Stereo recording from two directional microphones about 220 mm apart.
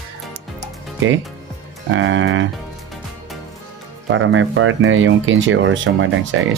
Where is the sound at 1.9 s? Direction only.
60° right (ahead or behind).